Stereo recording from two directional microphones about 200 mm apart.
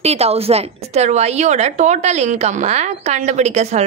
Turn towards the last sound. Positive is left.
turn(degrees=-35)  # may be behind; listen again after turning